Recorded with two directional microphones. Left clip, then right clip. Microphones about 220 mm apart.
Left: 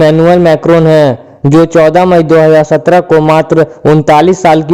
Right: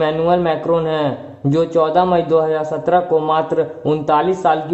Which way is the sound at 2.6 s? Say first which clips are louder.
Left 10 dB; 50° left (ahead or behind).